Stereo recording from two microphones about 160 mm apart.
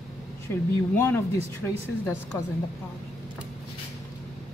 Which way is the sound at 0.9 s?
15° left (ahead or behind).